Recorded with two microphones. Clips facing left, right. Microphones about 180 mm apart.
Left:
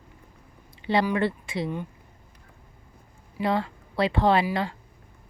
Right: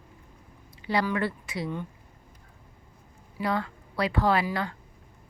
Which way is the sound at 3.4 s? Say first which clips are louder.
Left 3 dB; 25° left (ahead or behind).